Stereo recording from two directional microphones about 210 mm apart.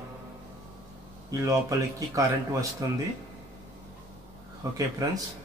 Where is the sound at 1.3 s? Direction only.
15° right (ahead or behind).